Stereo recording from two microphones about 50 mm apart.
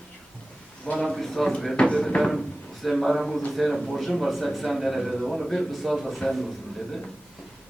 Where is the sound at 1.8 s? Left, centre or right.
Centre.